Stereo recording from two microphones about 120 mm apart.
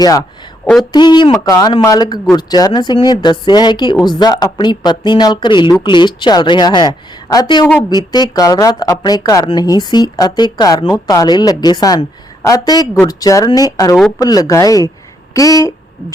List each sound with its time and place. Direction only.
0.0 s speech: 35° left (ahead or behind)